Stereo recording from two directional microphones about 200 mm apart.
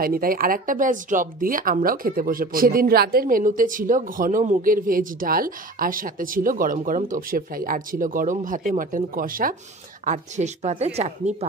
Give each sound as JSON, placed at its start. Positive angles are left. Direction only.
{"t": 0.0, "sound": "speech", "side_deg": -45}